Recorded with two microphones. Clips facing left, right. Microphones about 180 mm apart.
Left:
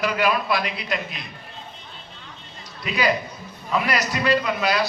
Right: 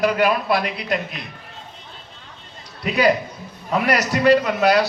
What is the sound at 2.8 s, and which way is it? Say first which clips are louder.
Speech: right 5 dB; 55° right (ahead or behind).